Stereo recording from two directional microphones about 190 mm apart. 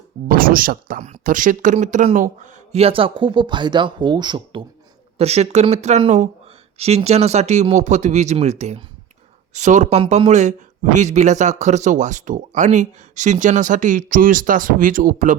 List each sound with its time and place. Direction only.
0.3 s speech: 50° right (ahead or behind)